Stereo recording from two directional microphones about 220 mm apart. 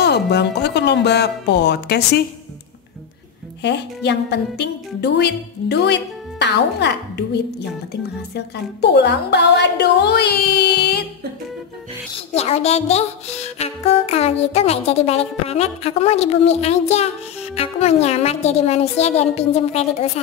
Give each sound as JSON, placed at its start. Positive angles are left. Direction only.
{"t": 0.0, "sound": "a woman's voice", "side_deg": 50}
{"t": 3.6, "sound": "a woman's voice", "side_deg": 50}
{"t": 12.4, "sound": "music", "side_deg": 30}